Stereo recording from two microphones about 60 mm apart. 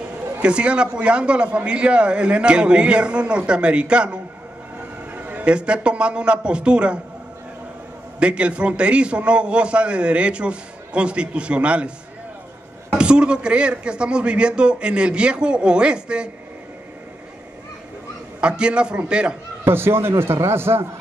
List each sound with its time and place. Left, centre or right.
0.4 s a man's voice: centre
5.1 s a sound: right
5.5 s a man's voice: centre
8.2 s a man's voice: centre
12.9 s a man's voice: centre
18.4 s a man's voice: centre
19.6 s a man's voice: right